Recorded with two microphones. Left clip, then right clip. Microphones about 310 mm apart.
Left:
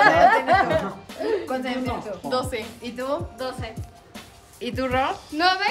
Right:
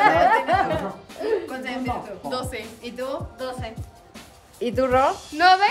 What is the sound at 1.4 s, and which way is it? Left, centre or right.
Speech, centre.